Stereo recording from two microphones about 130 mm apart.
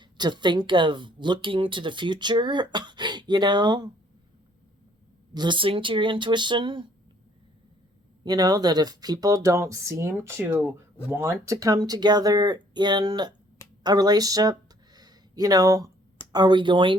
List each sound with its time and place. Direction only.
0.0 s speech: 35° right (ahead or behind)
5.3 s speech: 35° right (ahead or behind)
8.2 s speech: 30° right (ahead or behind)
14.9 s a sound: 30° right (ahead or behind)
16.3 s speech: 35° right (ahead or behind)